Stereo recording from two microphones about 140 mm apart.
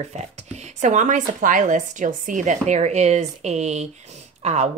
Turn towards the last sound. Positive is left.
turn(degrees=-50)  # may be behind; listen again after turning